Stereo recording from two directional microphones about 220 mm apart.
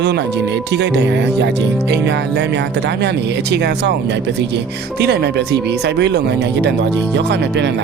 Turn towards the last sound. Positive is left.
turn(degrees=-50)  # may be behind; listen again after turning